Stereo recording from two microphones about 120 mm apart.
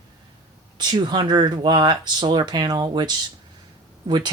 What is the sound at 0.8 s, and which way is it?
Speech, 40° right (ahead or behind).